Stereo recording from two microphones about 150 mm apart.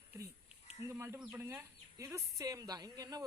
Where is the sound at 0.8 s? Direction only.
15° right (ahead or behind).